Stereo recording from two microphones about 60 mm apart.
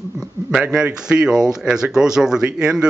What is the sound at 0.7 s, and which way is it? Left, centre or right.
Speech, centre.